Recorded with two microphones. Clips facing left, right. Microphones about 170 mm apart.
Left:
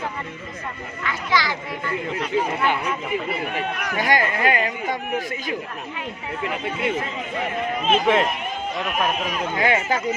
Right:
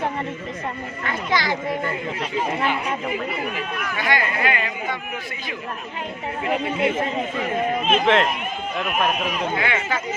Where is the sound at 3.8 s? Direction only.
40° left (ahead or behind).